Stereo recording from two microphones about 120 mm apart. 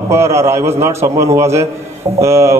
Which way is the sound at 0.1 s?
25° right (ahead or behind).